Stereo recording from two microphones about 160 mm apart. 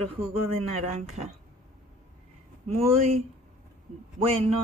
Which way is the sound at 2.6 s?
40° right (ahead or behind).